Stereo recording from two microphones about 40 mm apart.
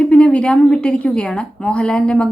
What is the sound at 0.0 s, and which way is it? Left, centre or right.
A woman's voice, left.